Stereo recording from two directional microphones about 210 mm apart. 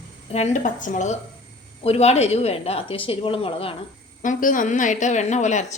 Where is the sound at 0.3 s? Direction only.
30° left (ahead or behind).